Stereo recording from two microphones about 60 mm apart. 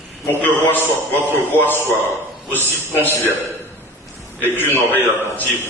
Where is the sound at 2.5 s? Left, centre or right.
Right.